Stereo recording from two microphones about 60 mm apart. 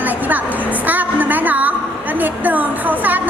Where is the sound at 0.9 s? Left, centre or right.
Right.